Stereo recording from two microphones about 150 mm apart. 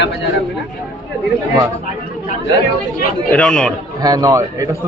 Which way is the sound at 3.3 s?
5° left (ahead or behind).